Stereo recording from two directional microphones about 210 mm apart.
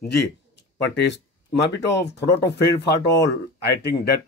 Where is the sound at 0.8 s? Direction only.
55° left (ahead or behind).